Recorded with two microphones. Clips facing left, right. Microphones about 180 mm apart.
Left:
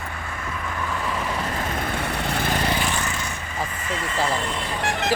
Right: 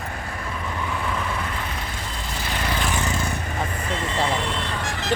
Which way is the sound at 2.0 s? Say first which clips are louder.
Left 7 dB; 65° left (ahead or behind).